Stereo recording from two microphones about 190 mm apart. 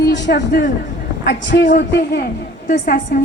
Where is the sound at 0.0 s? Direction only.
65° left (ahead or behind).